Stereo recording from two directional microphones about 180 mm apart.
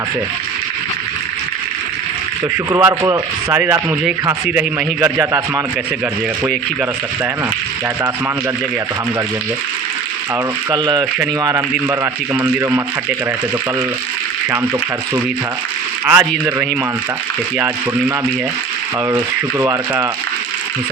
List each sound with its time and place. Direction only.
2.6 s speech: 15° right (ahead or behind)
10.7 s speech: 20° right (ahead or behind)
11.7 s speech: 10° right (ahead or behind)
16.0 s speech: 10° right (ahead or behind)
19.1 s speech: 10° right (ahead or behind)